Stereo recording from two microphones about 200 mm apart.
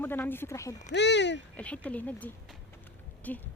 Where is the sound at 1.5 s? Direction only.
5° left (ahead or behind).